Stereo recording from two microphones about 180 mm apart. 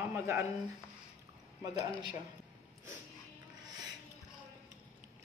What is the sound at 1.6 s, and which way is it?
Speech, 25° right (ahead or behind).